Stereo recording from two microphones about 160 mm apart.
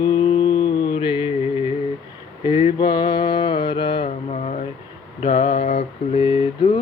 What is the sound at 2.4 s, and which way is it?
Mantra, 30° left (ahead or behind).